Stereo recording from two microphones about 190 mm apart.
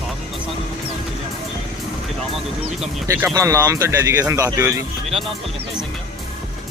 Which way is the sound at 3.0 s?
15° right (ahead or behind).